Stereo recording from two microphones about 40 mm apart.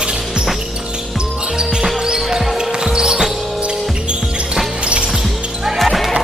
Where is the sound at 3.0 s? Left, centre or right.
Centre.